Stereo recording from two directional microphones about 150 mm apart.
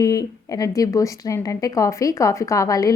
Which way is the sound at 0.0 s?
25° left (ahead or behind).